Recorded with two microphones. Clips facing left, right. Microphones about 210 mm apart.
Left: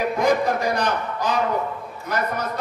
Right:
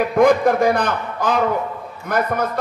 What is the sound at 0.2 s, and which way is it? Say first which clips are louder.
A man's voice: right 8 dB; 55° right (ahead or behind).